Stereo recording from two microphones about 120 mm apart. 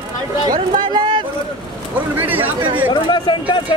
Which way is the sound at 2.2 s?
15° right (ahead or behind).